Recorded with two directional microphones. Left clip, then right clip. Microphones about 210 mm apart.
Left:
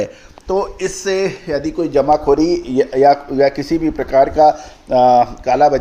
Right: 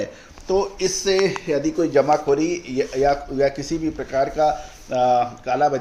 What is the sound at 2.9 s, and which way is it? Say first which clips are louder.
Speech: left 8 dB; 10° left (ahead or behind).